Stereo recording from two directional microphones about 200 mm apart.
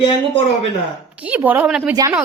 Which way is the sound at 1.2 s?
10° right (ahead or behind).